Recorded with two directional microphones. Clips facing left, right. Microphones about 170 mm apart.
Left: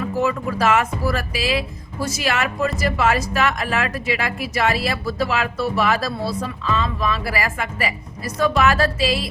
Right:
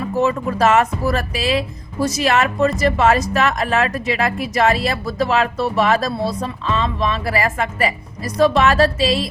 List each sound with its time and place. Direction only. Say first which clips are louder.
0.3 s a woman's voice: right 3 dB; 40° right (ahead or behind)